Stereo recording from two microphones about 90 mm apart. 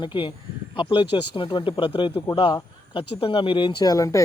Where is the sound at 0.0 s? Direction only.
65° left (ahead or behind).